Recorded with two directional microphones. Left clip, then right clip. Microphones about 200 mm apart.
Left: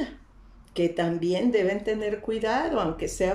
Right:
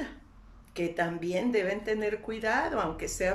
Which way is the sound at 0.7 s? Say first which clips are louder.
Left 5 dB; 20° left (ahead or behind).